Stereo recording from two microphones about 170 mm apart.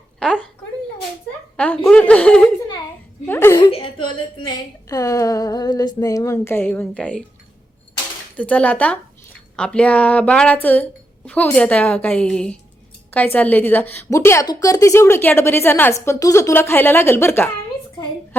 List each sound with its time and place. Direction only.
0.2 s a sound: 5° left (ahead or behind)
1.5 s a woman's voice: 10° left (ahead or behind)
3.2 s chuckle: 15° left (ahead or behind)
3.6 s a woman's voice: 30° left (ahead or behind); by 7.3 s 5° left (ahead or behind)
8.4 s a woman's voice: 10° left (ahead or behind)